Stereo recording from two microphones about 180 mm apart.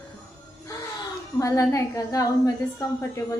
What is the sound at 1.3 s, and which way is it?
A woman's voice, 15° left (ahead or behind).